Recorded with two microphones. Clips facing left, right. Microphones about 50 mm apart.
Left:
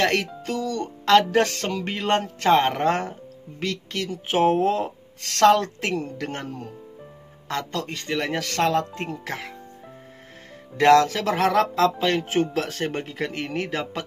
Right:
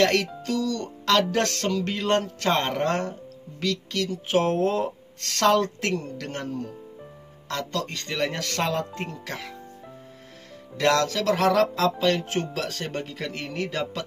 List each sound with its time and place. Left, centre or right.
0.0 s speech: centre
0.4 s music: centre
1.3 s speech: centre
4.6 s speech: centre
6.1 s speech: centre
9.2 s speech: centre
10.8 s speech: centre